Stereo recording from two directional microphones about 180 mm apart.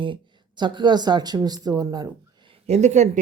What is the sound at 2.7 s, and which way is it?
Speech, 40° right (ahead or behind).